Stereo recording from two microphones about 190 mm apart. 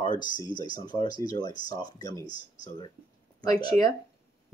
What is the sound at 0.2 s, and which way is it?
Speech, 25° left (ahead or behind).